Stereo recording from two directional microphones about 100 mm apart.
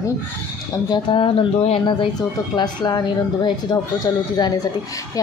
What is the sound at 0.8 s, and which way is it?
Speech, 50° left (ahead or behind).